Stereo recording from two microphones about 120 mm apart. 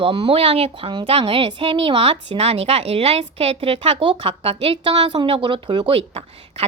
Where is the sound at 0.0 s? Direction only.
45° right (ahead or behind).